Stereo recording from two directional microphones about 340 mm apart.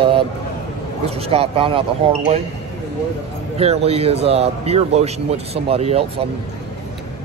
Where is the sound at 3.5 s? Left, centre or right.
Centre.